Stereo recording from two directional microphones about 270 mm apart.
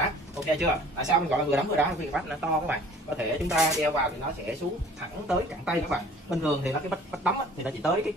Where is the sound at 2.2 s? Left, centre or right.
Centre.